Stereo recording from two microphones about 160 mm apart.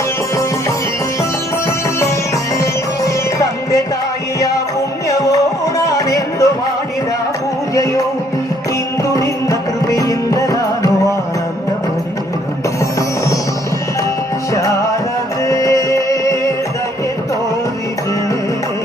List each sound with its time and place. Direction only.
5.0 s music: 20° left (ahead or behind)
6.1 s a sound: 20° left (ahead or behind)
9.0 s music: 20° left (ahead or behind)
15.4 s music: 20° left (ahead or behind)